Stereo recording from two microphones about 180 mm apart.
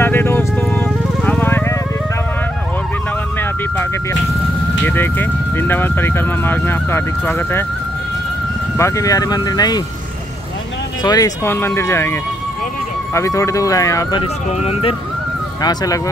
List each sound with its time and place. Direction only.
0.0 s music: 10° left (ahead or behind)
4.8 s speech: 10° left (ahead or behind)
8.7 s speech: 15° left (ahead or behind)
11.0 s speech: 20° left (ahead or behind)
14.2 s speech: 35° left (ahead or behind)
15.6 s speech: 20° left (ahead or behind)